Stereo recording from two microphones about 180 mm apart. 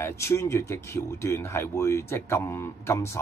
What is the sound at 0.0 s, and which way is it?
Speech, 15° left (ahead or behind).